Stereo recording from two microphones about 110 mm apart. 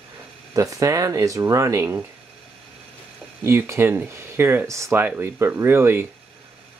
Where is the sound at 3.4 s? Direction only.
25° right (ahead or behind).